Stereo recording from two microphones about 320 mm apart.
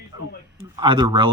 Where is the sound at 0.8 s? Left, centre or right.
Centre.